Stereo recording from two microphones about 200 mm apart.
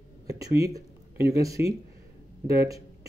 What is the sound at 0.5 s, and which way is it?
Speech, 15° right (ahead or behind).